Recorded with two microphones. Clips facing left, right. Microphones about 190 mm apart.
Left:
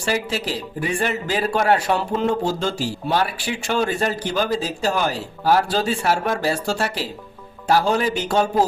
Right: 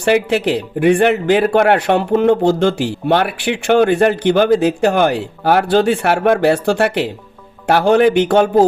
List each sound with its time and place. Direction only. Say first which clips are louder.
0.0 s speech: right 10 dB; 60° right (ahead or behind)